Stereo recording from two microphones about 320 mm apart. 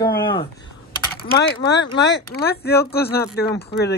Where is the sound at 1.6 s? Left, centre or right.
Left.